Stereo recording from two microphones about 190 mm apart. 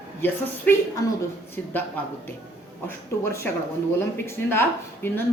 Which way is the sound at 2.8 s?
15° left (ahead or behind).